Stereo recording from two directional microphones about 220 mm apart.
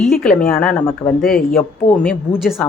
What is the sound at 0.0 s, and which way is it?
Speech, centre (ahead or behind).